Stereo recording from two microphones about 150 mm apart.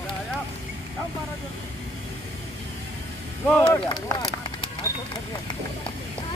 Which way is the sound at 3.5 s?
5° left (ahead or behind).